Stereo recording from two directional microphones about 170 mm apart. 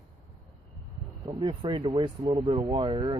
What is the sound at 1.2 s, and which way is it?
Speech, 30° right (ahead or behind).